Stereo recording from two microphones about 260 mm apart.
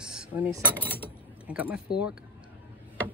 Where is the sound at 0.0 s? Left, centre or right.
Centre.